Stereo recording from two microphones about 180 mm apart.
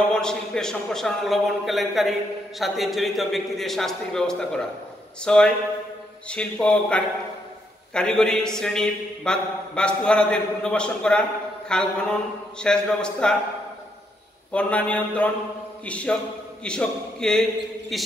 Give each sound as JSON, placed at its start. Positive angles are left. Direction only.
{"t": 0.1, "sound": "a man's voice", "side_deg": 5}
{"t": 14.5, "sound": "a man's voice", "side_deg": 5}